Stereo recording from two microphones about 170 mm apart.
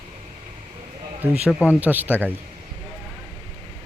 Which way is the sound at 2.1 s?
10° left (ahead or behind).